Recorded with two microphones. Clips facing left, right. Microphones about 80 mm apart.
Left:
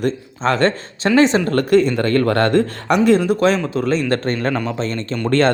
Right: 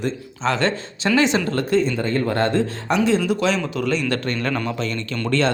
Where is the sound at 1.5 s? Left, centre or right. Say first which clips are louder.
Left 5 dB; left.